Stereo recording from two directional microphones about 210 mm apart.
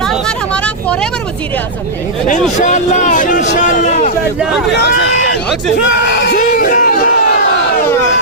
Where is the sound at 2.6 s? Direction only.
35° left (ahead or behind).